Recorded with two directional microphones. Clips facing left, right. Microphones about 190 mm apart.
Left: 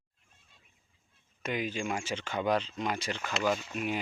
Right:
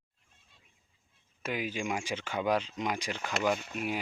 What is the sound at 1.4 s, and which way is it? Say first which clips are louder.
Speech: left 1 dB; 5° right (ahead or behind).